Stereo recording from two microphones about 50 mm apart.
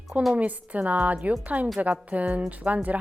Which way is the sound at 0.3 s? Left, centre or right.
Right.